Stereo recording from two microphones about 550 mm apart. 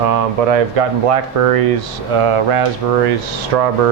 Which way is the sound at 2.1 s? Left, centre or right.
Right.